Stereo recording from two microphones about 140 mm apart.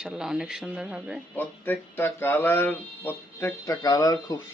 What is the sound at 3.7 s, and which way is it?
Speech, 25° left (ahead or behind).